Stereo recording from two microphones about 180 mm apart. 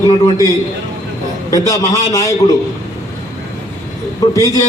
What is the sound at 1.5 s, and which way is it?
Speech, 20° left (ahead or behind).